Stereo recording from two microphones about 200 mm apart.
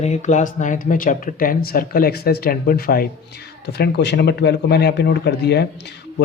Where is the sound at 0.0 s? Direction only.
35° left (ahead or behind).